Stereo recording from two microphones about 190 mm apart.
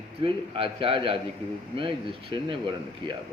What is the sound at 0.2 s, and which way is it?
Speech, 30° right (ahead or behind).